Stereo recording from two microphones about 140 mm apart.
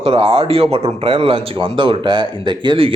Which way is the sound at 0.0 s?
40° right (ahead or behind).